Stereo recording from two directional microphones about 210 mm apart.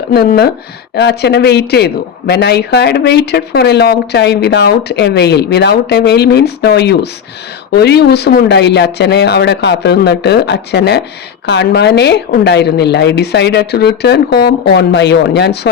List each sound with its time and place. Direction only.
0.1 s speech: 50° left (ahead or behind)